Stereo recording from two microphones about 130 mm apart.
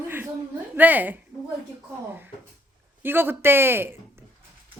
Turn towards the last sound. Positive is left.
turn(degrees=-15)  # may be behind; listen again after turning